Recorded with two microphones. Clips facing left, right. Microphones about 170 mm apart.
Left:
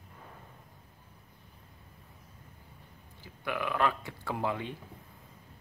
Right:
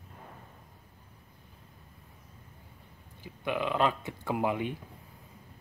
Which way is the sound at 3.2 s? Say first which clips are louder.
Right 3 dB; 20° right (ahead or behind).